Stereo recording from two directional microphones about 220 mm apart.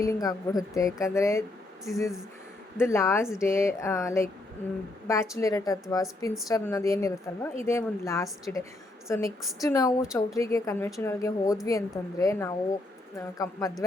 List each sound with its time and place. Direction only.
0.0 s speech: 15° left (ahead or behind)
2.7 s speech: 10° left (ahead or behind)